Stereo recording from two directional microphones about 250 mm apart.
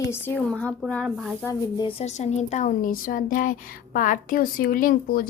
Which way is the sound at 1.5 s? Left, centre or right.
Left.